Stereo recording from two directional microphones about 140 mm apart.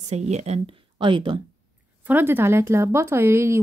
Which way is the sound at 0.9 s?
35° right (ahead or behind).